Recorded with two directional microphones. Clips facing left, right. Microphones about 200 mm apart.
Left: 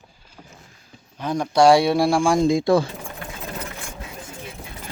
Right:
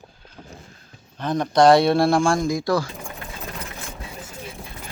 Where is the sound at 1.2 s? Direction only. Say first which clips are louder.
Even; 10° left (ahead or behind).